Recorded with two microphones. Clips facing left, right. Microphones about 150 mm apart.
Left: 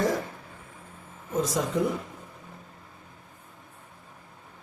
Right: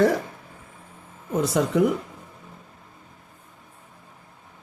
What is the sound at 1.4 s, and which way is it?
Speech, 70° right (ahead or behind).